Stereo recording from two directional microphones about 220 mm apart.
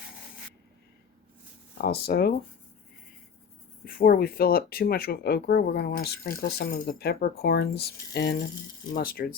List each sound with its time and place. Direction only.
1.8 s speech: 45° left (ahead or behind)
3.8 s speech: 40° left (ahead or behind)